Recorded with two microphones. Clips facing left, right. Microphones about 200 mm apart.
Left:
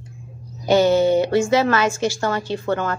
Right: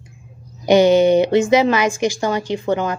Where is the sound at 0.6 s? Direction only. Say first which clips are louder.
Right 3 dB; 15° right (ahead or behind).